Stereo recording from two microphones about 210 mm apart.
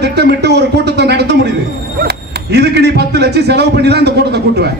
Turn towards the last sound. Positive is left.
turn(degrees=-50)  # may be behind; listen again after turning